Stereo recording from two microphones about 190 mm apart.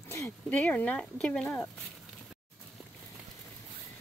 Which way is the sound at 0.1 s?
10° left (ahead or behind).